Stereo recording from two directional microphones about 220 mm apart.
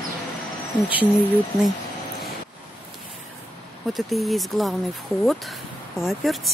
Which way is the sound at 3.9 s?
Centre (ahead or behind).